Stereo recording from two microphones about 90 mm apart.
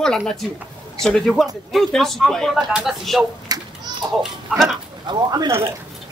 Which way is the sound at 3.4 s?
45° right (ahead or behind).